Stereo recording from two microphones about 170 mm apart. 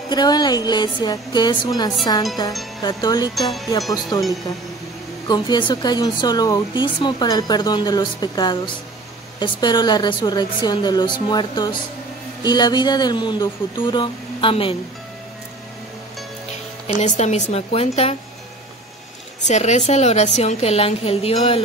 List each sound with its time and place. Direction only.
0.1 s speech: 25° left (ahead or behind)
5.3 s speech: 25° left (ahead or behind)
17.0 s speech: 40° left (ahead or behind)
19.4 s a woman's voice: 45° left (ahead or behind)